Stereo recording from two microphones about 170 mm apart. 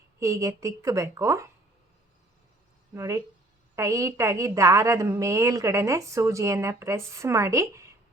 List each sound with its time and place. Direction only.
0.2 s a woman's voice: 20° right (ahead or behind)
2.9 s a woman's voice: 20° right (ahead or behind)